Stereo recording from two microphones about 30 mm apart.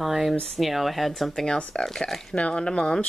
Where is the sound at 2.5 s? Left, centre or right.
Left.